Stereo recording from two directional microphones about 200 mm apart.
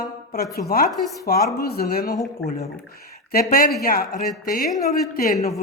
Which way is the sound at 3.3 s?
50° left (ahead or behind).